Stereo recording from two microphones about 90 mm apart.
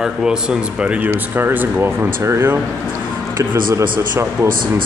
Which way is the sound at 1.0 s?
25° right (ahead or behind).